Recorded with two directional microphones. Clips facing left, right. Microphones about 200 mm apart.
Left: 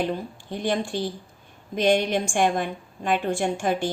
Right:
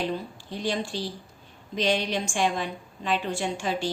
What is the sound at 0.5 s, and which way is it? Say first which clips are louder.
A woman's voice: left 4 dB; 55° left (ahead or behind).